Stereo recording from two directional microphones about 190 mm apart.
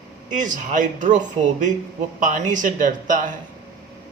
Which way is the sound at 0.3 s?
40° right (ahead or behind).